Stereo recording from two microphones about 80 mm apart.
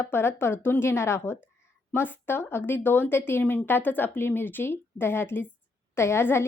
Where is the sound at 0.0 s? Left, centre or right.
Left.